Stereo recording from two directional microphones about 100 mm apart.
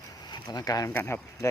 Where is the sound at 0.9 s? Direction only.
25° left (ahead or behind).